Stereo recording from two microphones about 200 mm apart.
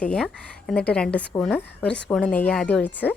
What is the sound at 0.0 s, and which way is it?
A woman's voice, 5° left (ahead or behind).